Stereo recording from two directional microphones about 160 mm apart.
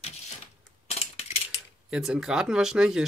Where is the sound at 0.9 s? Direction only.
40° left (ahead or behind).